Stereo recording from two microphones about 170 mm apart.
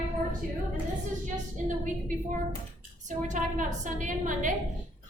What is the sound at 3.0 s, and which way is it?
A woman's voice, 45° right (ahead or behind).